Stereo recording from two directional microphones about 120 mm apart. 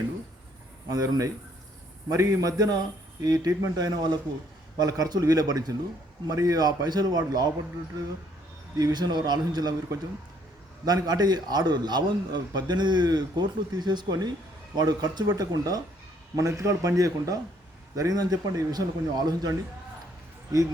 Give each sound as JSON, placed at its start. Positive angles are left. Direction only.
{"t": 0.9, "sound": "a man's voice", "side_deg": -30}
{"t": 8.8, "sound": "a man's voice", "side_deg": -35}
{"t": 10.8, "sound": "a man's voice", "side_deg": -35}